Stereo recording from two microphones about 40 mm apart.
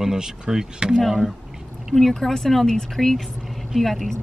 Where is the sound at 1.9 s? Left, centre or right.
Centre.